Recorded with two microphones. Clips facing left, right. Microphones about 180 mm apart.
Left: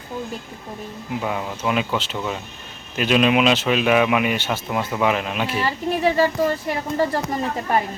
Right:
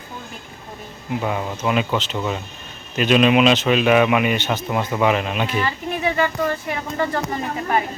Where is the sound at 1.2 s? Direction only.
Centre (ahead or behind).